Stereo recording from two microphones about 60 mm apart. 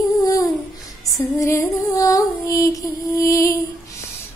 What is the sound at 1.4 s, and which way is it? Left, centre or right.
Music, left.